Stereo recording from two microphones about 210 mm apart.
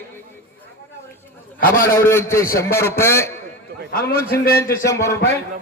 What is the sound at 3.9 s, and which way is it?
Speech, 45° left (ahead or behind).